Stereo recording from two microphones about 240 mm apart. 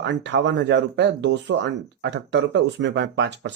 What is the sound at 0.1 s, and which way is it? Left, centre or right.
Speech, right.